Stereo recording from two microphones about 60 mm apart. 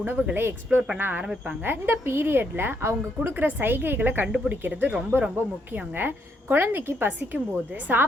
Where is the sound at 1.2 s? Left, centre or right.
Centre.